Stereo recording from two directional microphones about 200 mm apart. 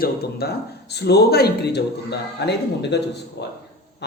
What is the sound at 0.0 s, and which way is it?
Speech, 55° left (ahead or behind).